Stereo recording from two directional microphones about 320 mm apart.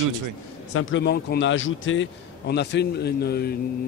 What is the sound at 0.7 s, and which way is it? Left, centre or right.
A man's voice, left.